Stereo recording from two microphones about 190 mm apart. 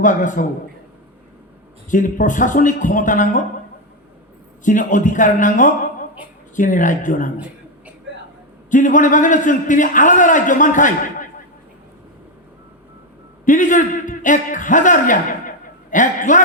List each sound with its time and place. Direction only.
0.0 s a man's voice: 40° left (ahead or behind)
1.9 s a man's voice: 45° left (ahead or behind)
4.6 s a man's voice: 45° left (ahead or behind)
8.7 s a man's voice: 40° left (ahead or behind)
13.4 s a man's voice: 40° left (ahead or behind)